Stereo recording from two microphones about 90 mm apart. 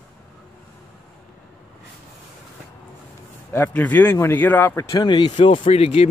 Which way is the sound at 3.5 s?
20° left (ahead or behind).